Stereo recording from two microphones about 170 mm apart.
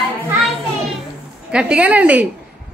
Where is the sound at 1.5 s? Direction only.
5° right (ahead or behind).